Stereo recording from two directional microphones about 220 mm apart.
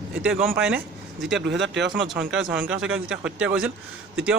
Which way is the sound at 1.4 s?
55° right (ahead or behind).